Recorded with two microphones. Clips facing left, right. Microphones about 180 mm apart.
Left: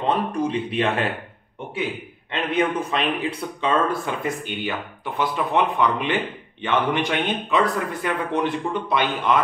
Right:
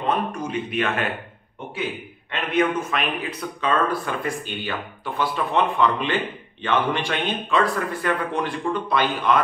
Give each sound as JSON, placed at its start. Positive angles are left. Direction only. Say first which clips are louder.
{"t": 0.3, "sound": "speech", "louder": "left 4 dB", "side_deg": 30}
{"t": 2.5, "sound": "speech", "louder": "right 1 dB", "side_deg": 30}